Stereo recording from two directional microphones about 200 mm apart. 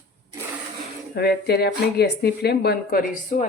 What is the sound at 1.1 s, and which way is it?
A woman's voice, 55° left (ahead or behind).